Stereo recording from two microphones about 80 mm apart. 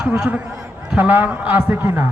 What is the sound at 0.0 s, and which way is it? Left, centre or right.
A man's voice, centre.